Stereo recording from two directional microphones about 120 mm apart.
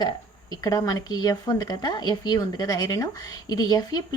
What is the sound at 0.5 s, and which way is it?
Speech, 35° left (ahead or behind).